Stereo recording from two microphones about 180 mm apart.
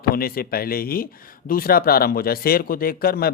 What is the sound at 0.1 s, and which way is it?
Speech, 55° left (ahead or behind).